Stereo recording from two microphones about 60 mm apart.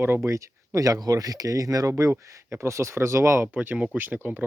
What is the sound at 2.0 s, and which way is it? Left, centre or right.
Speech, right.